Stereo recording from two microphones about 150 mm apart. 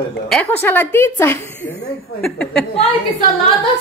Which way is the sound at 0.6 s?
15° left (ahead or behind).